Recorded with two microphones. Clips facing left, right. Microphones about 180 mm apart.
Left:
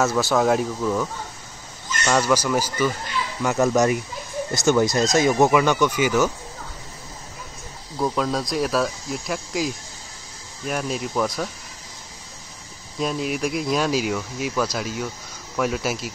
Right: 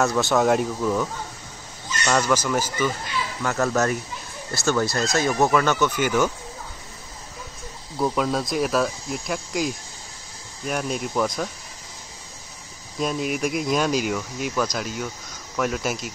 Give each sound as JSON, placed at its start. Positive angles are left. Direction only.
{"t": 0.0, "sound": "speech", "side_deg": 0}
{"t": 2.0, "sound": "speech", "side_deg": 10}
{"t": 8.0, "sound": "speech", "side_deg": 0}
{"t": 13.0, "sound": "speech", "side_deg": 0}